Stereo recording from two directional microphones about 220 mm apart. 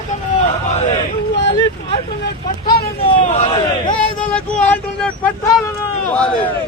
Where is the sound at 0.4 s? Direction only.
30° left (ahead or behind).